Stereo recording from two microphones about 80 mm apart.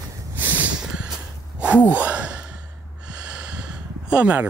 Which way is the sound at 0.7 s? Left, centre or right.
Centre.